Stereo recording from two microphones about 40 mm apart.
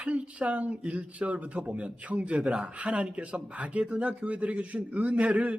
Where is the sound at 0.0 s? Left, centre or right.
Right.